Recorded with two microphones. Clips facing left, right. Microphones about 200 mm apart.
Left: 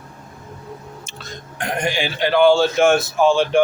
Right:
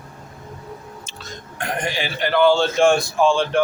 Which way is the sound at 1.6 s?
15° left (ahead or behind).